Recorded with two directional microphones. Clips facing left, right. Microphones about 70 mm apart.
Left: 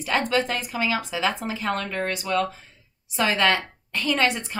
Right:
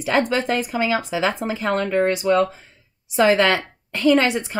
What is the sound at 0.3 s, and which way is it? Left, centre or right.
Speech, right.